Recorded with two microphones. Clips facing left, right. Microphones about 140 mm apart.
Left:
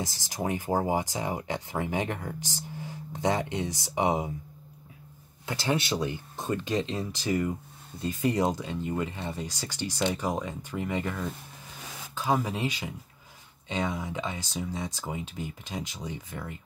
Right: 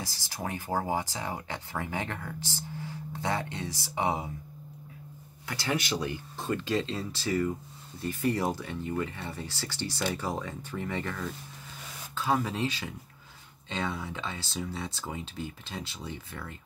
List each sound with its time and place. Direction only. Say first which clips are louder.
0.0 s speech: left 5 dB; 20° left (ahead or behind)
5.5 s speech: left 3 dB; 25° left (ahead or behind)